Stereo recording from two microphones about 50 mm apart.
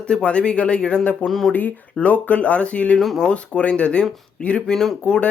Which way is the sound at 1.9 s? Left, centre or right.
Left.